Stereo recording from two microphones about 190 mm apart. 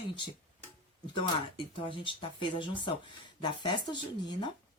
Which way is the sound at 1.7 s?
25° left (ahead or behind).